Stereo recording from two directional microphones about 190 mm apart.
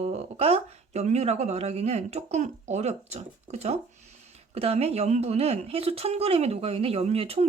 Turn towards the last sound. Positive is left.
turn(degrees=-30)  # may be behind; listen again after turning